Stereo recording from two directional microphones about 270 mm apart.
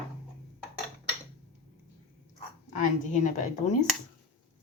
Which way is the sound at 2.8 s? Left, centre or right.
Left.